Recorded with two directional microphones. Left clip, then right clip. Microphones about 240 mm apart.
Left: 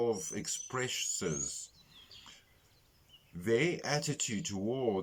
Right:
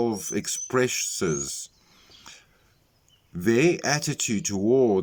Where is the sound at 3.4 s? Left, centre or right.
Right.